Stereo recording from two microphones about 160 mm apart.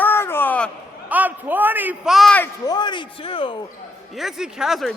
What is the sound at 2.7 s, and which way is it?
Speech, 30° left (ahead or behind).